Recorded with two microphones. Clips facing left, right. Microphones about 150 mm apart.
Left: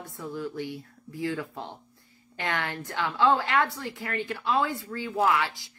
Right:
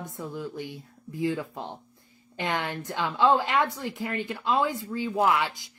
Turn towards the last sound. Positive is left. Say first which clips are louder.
# right 1 dB
turn(degrees=-20)  # may be behind; listen again after turning